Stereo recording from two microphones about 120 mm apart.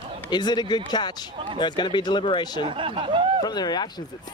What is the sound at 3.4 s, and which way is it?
Speech, 35° left (ahead or behind).